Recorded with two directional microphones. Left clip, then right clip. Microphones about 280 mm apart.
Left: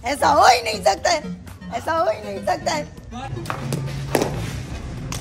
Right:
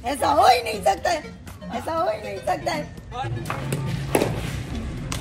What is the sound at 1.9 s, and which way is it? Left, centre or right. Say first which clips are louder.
Speech: left 4 dB; centre.